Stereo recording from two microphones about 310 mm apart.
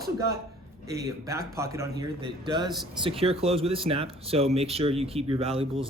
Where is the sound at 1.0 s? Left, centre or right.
Centre.